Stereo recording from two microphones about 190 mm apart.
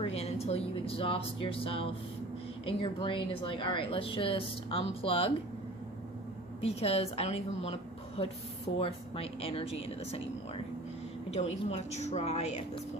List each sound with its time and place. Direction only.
0.0 s a woman's voice: 35° left (ahead or behind)
6.6 s a woman's voice: 30° left (ahead or behind)
11.3 s a woman's voice: 35° left (ahead or behind)